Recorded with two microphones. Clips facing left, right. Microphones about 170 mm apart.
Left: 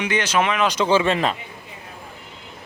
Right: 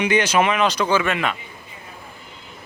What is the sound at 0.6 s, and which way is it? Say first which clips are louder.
Speech: left 1 dB; 20° left (ahead or behind).